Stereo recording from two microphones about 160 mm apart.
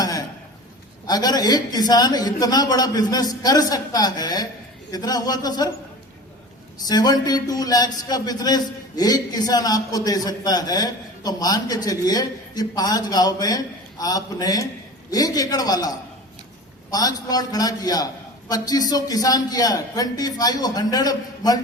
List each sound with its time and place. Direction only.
0.0 s a sound: 25° left (ahead or behind)
1.0 s a man's voice: 25° left (ahead or behind)
6.8 s a man's voice: 25° left (ahead or behind)